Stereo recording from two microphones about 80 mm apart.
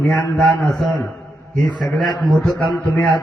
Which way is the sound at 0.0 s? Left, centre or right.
Left.